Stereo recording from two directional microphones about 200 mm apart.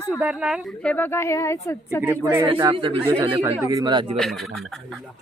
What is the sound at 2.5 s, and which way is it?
Speech, 25° right (ahead or behind).